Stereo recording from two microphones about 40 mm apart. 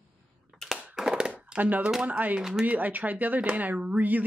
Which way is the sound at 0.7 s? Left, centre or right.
Centre.